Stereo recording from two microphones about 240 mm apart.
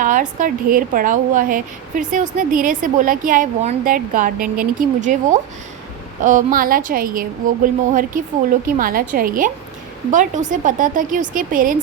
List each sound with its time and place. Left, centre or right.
0.0 s a woman's voice: right